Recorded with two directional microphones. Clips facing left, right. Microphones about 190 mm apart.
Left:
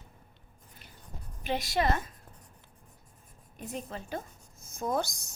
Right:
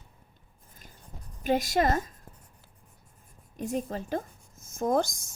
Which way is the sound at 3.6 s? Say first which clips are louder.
Right 7 dB; 45° right (ahead or behind).